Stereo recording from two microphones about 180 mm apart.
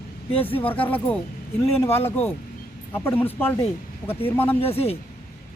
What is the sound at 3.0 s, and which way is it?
Speech, 10° left (ahead or behind).